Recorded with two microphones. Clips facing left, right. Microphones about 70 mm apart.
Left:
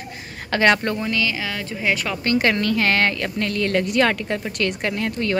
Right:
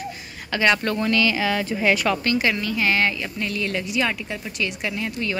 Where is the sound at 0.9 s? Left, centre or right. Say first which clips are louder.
Right 3 dB; centre.